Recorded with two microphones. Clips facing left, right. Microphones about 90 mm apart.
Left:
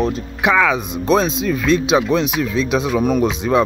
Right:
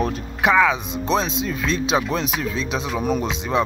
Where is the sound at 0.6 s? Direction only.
25° right (ahead or behind).